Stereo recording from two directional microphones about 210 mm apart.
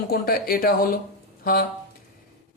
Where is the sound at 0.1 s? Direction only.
45° left (ahead or behind).